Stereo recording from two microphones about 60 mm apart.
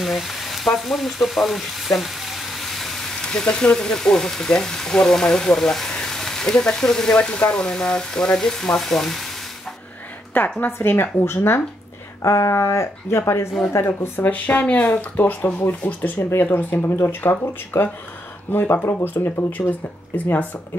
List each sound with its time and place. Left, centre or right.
0.0 s speech: centre
10.6 s speech: left
12.2 s speech: left
14.3 s speech: left
20.2 s speech: left